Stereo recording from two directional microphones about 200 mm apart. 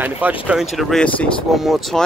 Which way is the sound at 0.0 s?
10° right (ahead or behind).